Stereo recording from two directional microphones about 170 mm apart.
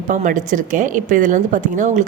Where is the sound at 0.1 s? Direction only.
50° right (ahead or behind).